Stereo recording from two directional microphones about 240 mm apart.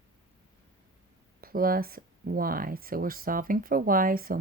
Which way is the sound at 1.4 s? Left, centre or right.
Right.